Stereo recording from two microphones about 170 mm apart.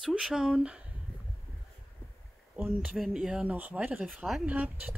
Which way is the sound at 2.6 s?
10° right (ahead or behind).